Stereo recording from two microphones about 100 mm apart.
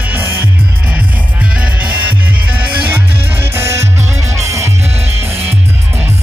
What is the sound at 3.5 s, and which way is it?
Music, 25° right (ahead or behind).